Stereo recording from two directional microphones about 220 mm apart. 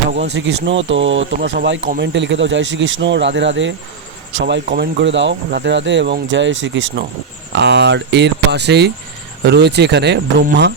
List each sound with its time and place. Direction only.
0.3 s speech: 55° right (ahead or behind)